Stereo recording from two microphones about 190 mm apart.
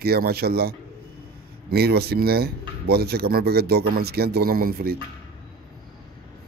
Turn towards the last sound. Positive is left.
turn(degrees=-55)  # may be behind; listen again after turning